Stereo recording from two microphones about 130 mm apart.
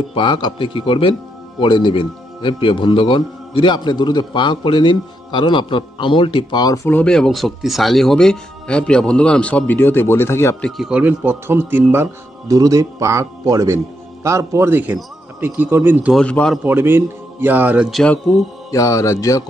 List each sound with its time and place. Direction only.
0.1 s a man's voice: 35° left (ahead or behind)
6.6 s speech: 25° left (ahead or behind)
6.9 s speech: 10° left (ahead or behind)
10.9 s a man's voice: 10° right (ahead or behind)
16.1 s a man's voice: 5° left (ahead or behind)
16.6 s a man's voice: 15° right (ahead or behind)
18.7 s speech: 25° left (ahead or behind)